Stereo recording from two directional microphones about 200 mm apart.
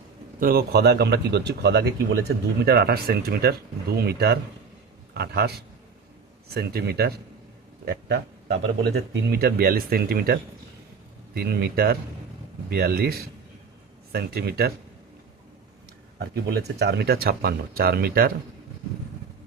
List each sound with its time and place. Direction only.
0.3 s a man's voice: 50° right (ahead or behind)
6.5 s a man's voice: 50° right (ahead or behind)
16.1 s speech: 55° right (ahead or behind)